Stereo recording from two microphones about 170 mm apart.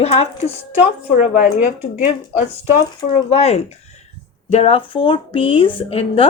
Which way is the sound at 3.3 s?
35° left (ahead or behind).